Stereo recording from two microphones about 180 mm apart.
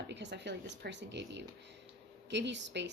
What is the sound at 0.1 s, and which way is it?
Speech, 75° right (ahead or behind).